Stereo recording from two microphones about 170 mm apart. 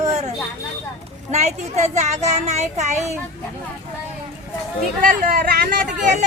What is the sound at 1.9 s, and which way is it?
Child singing, 45° right (ahead or behind).